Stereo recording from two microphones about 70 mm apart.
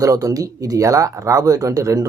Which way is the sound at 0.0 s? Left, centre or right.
Right.